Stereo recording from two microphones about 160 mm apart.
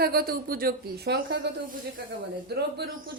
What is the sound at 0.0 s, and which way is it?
Speech, 75° right (ahead or behind).